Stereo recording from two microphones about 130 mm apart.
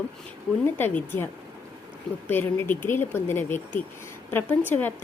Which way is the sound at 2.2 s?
15° left (ahead or behind).